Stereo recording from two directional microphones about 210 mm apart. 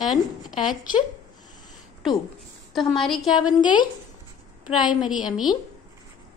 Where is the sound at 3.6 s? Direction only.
20° left (ahead or behind).